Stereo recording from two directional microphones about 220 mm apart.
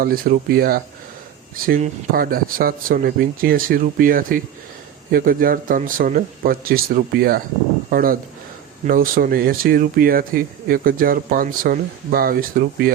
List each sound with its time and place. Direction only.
0.0 s speech: 45° right (ahead or behind)